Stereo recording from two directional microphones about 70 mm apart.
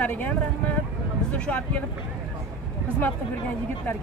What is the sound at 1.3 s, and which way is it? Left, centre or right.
Speech, centre.